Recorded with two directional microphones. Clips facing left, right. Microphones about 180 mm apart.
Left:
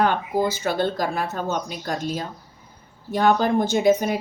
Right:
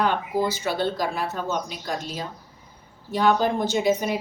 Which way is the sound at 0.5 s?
50° left (ahead or behind).